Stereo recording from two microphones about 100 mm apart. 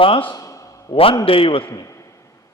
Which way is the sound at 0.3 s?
35° left (ahead or behind).